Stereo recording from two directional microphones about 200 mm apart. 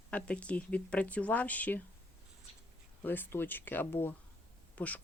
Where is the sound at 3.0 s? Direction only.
10° left (ahead or behind).